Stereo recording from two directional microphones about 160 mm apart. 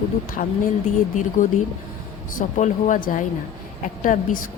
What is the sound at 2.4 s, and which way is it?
Speech, 50° left (ahead or behind).